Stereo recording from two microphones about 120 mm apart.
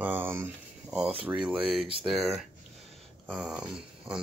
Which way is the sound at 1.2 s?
5° right (ahead or behind).